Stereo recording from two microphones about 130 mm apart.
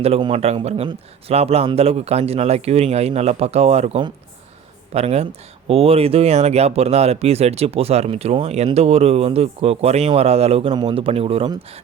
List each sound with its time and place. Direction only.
0.2 s speech: 50° right (ahead or behind)